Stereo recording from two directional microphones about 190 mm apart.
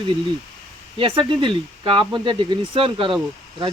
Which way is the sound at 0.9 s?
25° right (ahead or behind).